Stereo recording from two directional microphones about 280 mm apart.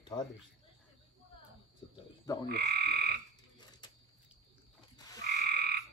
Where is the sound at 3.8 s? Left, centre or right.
Centre.